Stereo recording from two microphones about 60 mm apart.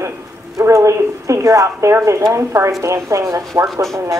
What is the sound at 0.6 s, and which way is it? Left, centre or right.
Speech, right.